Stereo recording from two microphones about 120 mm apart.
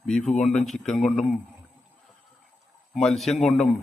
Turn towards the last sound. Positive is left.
turn(degrees=5)  # may be behind; listen again after turning